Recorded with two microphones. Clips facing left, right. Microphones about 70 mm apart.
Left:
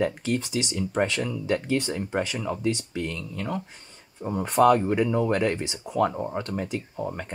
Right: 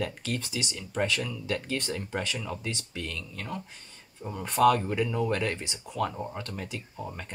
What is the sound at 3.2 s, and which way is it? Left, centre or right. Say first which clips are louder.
Speech: left 6 dB; left.